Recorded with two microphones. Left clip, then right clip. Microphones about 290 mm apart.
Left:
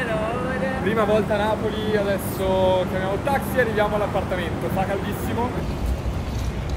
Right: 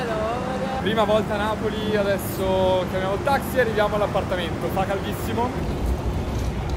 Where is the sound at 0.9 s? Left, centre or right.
Centre.